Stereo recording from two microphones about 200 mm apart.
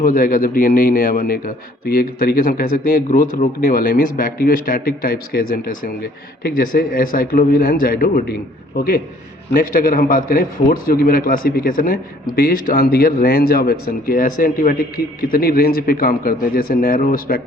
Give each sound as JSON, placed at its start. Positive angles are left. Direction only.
{"t": 0.0, "sound": "a man's voice", "side_deg": 45}